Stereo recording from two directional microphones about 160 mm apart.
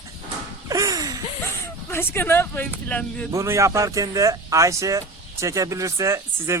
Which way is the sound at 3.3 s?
20° right (ahead or behind).